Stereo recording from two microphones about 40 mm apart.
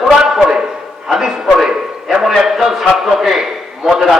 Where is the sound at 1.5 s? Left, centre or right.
Centre.